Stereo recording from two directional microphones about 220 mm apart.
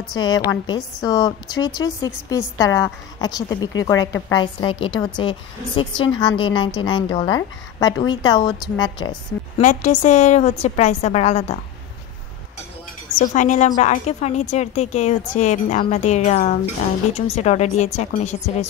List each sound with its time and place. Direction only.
0.1 s a woman's voice: 15° left (ahead or behind)
9.6 s a woman's voice: 35° left (ahead or behind)
13.2 s a woman's voice: 35° left (ahead or behind)